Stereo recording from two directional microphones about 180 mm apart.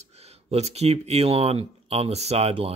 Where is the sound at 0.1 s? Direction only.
35° right (ahead or behind).